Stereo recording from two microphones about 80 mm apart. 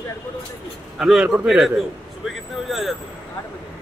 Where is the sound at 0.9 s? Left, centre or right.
Centre.